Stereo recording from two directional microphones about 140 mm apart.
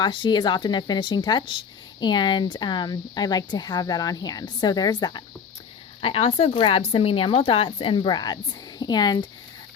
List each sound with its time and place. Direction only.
0.0 s speech: 35° left (ahead or behind)
6.0 s speech: 45° left (ahead or behind)